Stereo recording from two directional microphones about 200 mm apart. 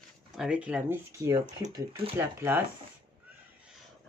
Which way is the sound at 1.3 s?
20° right (ahead or behind).